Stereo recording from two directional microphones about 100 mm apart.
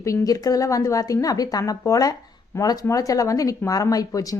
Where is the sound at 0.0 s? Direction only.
35° left (ahead or behind).